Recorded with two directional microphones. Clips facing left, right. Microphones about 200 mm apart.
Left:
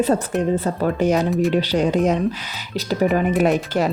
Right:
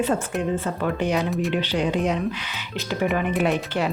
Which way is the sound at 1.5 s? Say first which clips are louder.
Left 5 dB; 40° left (ahead or behind).